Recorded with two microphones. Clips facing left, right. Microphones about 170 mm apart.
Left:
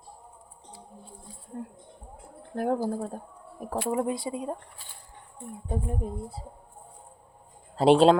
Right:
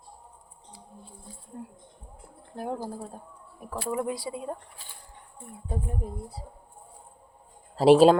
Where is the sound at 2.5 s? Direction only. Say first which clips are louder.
Left 6 dB; 60° left (ahead or behind).